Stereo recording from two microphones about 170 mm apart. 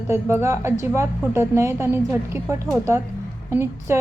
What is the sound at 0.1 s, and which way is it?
A woman's voice, 15° right (ahead or behind).